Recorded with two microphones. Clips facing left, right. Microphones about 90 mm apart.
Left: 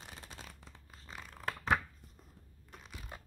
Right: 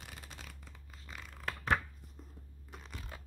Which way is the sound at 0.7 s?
30° left (ahead or behind).